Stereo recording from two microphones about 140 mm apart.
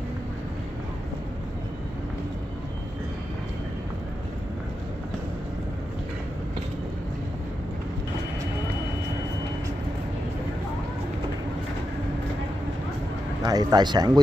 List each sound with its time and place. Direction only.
13.4 s speech: 30° right (ahead or behind)